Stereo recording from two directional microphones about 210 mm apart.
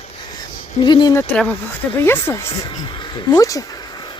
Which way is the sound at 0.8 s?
20° left (ahead or behind).